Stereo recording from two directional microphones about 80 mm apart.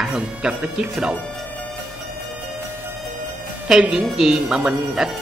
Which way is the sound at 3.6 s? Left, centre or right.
Centre.